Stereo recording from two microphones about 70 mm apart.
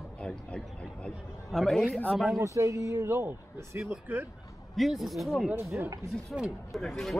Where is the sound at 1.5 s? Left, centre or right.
Centre.